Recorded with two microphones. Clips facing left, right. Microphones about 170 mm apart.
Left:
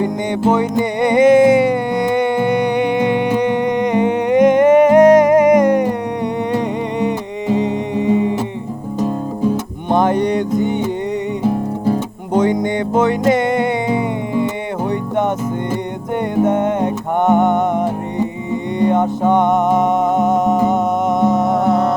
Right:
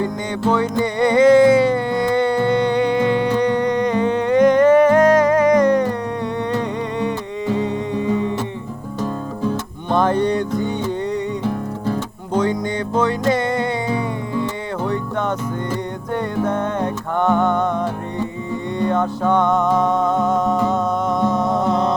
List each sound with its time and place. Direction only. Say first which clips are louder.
0.0 s music: left 4 dB; 20° left (ahead or behind)
7.0 s music: left 3 dB; 20° left (ahead or behind)
16.3 s music: left 7 dB; 20° left (ahead or behind)